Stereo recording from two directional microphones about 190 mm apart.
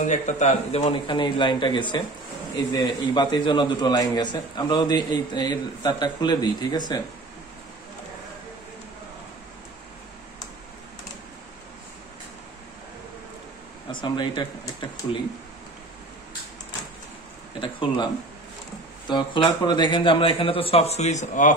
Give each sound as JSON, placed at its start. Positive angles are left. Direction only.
{"t": 0.0, "sound": "a man's voice", "side_deg": 40}
{"t": 14.0, "sound": "a man's voice", "side_deg": 25}
{"t": 17.6, "sound": "a man's voice", "side_deg": 25}